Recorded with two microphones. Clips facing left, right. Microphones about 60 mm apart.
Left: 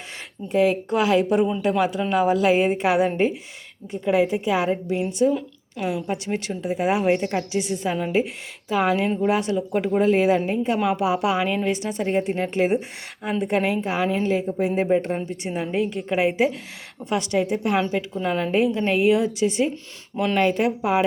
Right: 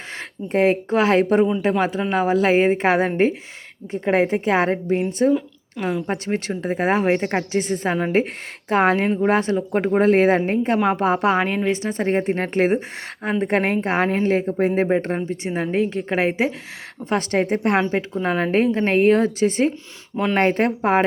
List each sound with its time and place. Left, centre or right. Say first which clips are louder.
0.2 s speech: right 1 dB; right
5.3 s a woman's voice: right 5 dB; centre
6.1 s speech: right 2 dB; right
7.3 s a woman's voice: right 3 dB; right
17.9 s a woman's voice: right 2 dB; right